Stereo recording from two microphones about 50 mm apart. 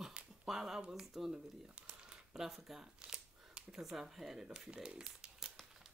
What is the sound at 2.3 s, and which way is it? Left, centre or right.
Speech, centre.